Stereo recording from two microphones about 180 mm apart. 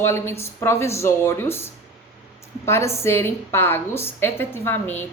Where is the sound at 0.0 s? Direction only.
15° left (ahead or behind).